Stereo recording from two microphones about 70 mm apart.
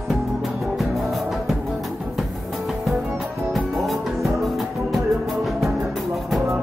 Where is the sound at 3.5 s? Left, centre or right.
Centre.